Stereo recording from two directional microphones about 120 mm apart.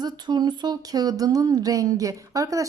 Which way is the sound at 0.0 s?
35° right (ahead or behind).